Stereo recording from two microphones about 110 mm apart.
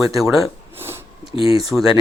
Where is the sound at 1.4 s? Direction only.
60° left (ahead or behind).